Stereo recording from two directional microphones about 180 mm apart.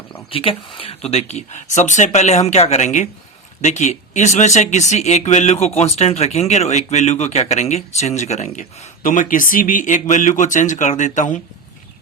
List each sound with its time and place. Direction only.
0.3 s speech: 30° left (ahead or behind)